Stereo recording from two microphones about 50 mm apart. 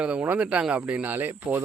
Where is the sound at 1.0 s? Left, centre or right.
Right.